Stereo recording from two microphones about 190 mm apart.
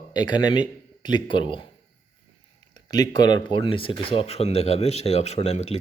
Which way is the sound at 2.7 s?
20° left (ahead or behind).